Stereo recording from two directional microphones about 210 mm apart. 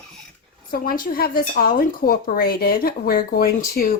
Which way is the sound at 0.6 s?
45° left (ahead or behind).